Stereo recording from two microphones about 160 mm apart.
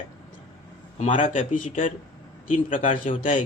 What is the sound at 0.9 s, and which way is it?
A man's voice, 50° left (ahead or behind).